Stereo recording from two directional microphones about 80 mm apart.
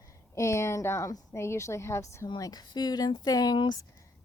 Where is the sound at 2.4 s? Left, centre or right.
Left.